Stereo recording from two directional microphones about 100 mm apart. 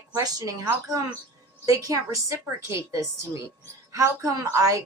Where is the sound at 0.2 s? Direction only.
40° right (ahead or behind).